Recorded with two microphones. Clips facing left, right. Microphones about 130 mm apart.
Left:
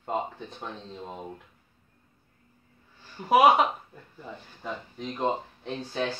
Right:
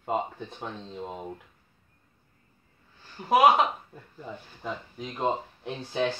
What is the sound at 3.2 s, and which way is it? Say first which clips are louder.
Speech: left 1 dB; centre (ahead or behind).